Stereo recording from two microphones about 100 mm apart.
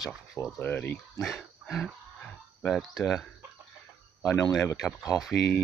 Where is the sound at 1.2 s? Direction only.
Centre (ahead or behind).